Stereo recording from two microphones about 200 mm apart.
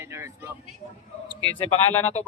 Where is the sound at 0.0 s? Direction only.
15° right (ahead or behind).